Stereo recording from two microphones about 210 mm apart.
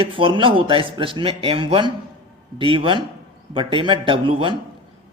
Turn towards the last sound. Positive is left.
turn(degrees=-25)  # may be behind; listen again after turning